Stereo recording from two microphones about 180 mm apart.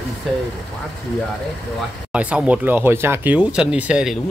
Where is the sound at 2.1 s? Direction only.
5° right (ahead or behind).